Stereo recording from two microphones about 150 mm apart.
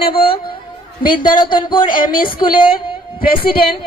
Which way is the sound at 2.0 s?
70° left (ahead or behind).